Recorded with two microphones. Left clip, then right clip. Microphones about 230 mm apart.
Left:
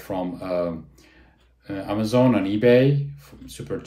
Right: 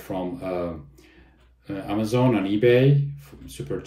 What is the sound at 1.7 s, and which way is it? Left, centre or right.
Speech, centre.